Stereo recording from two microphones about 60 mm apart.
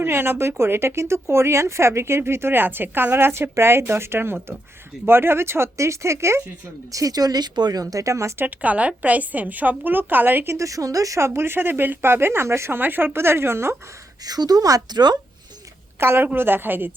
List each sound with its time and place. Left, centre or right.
0.0 s speech: right
6.9 s a woman's voice: right
8.4 s a woman's voice: right
10.5 s a woman's voice: right
11.2 s speech: right
12.8 s speech: right
14.3 s speech: right
16.0 s speech: right